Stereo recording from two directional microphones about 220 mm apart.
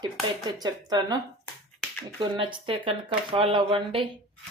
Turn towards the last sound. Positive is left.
turn(degrees=-25)  # may be behind; listen again after turning